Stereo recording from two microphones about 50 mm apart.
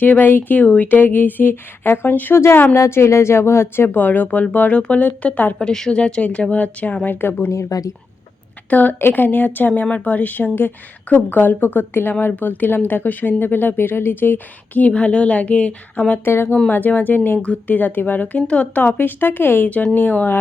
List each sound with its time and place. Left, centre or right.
0.0 s speech: left
2.3 s speech: left
2.7 s speech: left
3.8 s speech: left
5.5 s a woman's voice: centre
6.5 s speech: left
7.0 s speech: left
8.7 s speech: left
9.0 s speech: left
16.2 s speech: left
16.6 s speech: left
17.4 s speech: left
17.7 s speech: left